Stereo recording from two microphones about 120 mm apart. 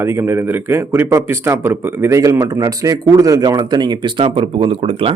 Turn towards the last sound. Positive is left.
turn(degrees=-50)  # may be behind; listen again after turning